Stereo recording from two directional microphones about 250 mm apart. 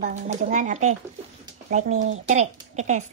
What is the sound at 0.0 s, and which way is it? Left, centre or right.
A child's voice, right.